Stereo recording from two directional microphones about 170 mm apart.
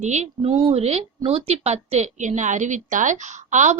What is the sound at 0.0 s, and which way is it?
A woman's voice, 40° right (ahead or behind).